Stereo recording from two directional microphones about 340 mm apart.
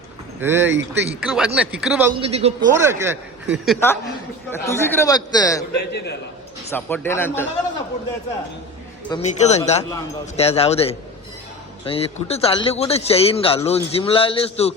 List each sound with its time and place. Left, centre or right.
0.4 s a man's voice: centre
3.8 s speech: centre
5.7 s a man's voice: left
6.7 s speech: centre
9.0 s speech: centre